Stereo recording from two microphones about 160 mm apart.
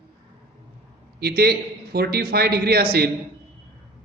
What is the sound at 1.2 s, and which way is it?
Speech, 80° right.